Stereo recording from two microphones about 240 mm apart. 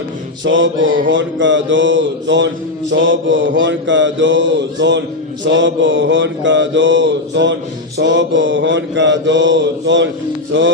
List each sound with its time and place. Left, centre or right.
0.4 s mantra: right